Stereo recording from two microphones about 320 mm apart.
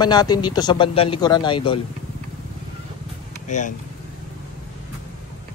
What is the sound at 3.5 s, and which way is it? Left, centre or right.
Speech, left.